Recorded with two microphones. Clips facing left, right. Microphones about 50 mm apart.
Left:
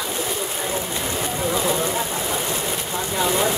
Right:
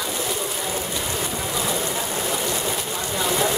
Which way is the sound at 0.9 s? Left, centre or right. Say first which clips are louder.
Left 2 dB; left.